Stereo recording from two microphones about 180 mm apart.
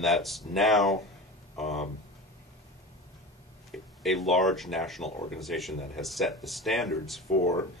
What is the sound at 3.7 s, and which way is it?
Speech, centre (ahead or behind).